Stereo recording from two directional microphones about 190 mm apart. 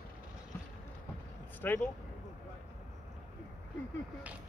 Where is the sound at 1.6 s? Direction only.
10° left (ahead or behind).